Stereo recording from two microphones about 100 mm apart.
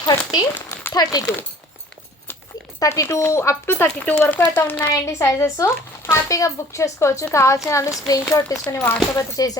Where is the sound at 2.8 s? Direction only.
30° left (ahead or behind).